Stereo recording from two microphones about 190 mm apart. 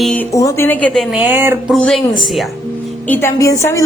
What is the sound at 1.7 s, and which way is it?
Speech, centre (ahead or behind).